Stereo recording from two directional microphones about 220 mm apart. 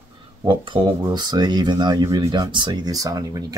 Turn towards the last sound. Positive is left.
turn(degrees=-15)  # may be behind; listen again after turning